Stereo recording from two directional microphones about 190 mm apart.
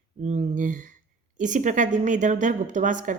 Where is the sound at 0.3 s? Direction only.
40° right (ahead or behind).